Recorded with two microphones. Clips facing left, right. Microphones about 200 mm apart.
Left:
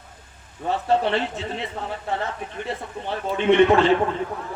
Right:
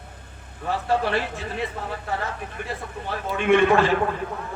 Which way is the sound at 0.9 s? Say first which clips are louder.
Left 2 dB; 25° left (ahead or behind).